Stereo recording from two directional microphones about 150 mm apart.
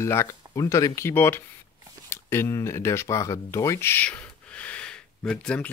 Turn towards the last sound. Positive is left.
turn(degrees=5)  # may be behind; listen again after turning